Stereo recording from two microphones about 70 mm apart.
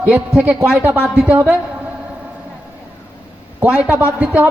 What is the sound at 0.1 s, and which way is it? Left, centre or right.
Speech, centre.